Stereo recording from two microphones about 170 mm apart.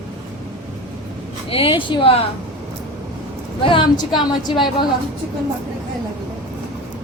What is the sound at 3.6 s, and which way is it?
A woman's voice, 30° left (ahead or behind).